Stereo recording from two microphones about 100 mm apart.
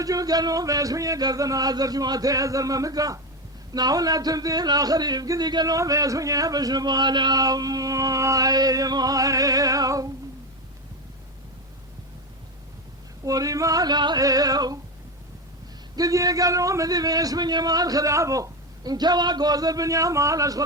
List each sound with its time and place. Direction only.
0.0 s speech: 35° right (ahead or behind)
13.2 s speech: 35° right (ahead or behind)
16.0 s speech: 35° right (ahead or behind)